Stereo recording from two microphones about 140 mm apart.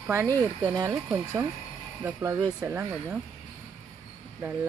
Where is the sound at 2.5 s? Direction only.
15° right (ahead or behind).